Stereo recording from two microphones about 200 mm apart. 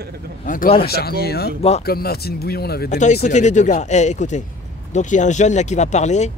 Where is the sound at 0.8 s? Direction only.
50° left (ahead or behind).